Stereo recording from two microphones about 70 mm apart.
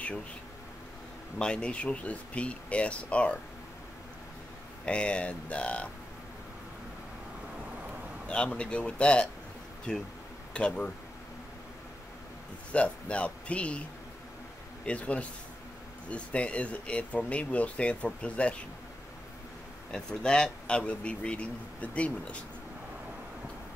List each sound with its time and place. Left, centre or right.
1.4 s speech: centre
4.8 s speech: centre
8.3 s speech: centre
12.7 s speech: centre
14.9 s a man's voice: centre
19.9 s speech: centre